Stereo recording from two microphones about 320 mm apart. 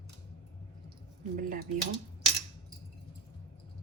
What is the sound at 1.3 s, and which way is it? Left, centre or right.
Speech, right.